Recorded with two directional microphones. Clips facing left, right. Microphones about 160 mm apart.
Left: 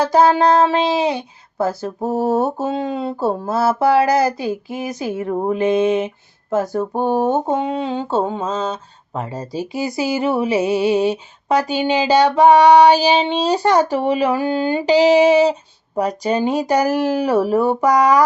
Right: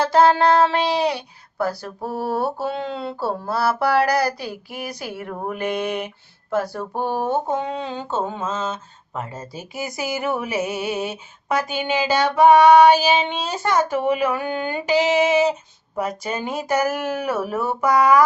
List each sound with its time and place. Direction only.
0.0 s speech: 15° left (ahead or behind)
7.4 s mantra: 15° left (ahead or behind)
8.1 s speech: 35° left (ahead or behind)